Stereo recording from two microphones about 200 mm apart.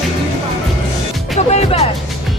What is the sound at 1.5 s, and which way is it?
Music, 35° left (ahead or behind).